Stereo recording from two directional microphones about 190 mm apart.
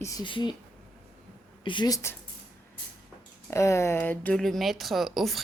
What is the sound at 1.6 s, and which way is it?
Speech, 25° left (ahead or behind).